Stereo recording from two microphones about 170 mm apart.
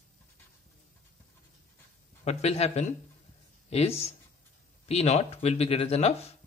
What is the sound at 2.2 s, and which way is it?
Speech, 40° left (ahead or behind).